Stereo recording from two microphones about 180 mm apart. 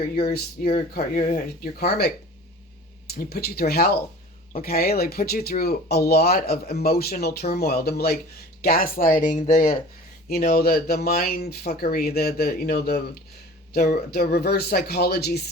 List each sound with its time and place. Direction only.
0.2 s speech: 55° left (ahead or behind)
10.2 s speech: 55° left (ahead or behind)